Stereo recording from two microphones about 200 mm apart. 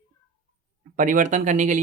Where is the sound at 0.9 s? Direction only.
40° right (ahead or behind).